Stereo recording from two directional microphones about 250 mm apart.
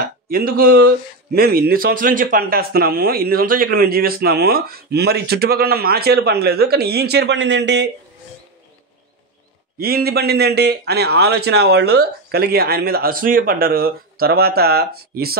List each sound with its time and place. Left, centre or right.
0.0 s speech: right
9.8 s speech: right